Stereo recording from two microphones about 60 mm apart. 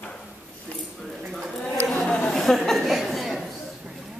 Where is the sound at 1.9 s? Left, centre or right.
Centre.